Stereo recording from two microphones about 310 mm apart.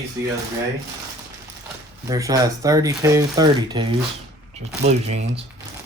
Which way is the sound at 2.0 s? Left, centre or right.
Centre.